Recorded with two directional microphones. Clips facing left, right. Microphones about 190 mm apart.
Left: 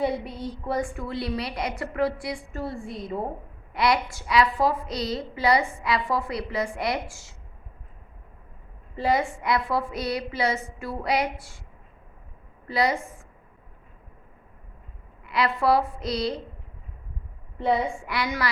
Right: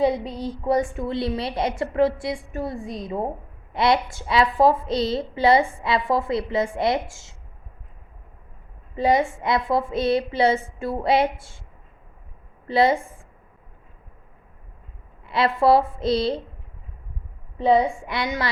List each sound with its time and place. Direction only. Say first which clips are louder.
0.0 s a woman's voice: right 5 dB; 20° right (ahead or behind)
9.0 s a woman's voice: right 4 dB; 20° right (ahead or behind)
12.6 s a woman's voice: right 6 dB; 25° right (ahead or behind)
15.3 s a woman's voice: right 4 dB; 25° right (ahead or behind)
17.6 s a woman's voice: right 6 dB; 20° right (ahead or behind)